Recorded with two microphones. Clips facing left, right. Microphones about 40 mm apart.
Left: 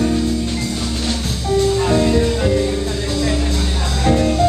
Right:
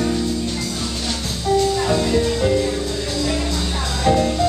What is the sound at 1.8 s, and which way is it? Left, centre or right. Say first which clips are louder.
Music: left 3 dB; left.